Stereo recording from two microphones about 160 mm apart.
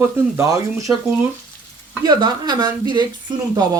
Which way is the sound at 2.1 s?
25° right (ahead or behind).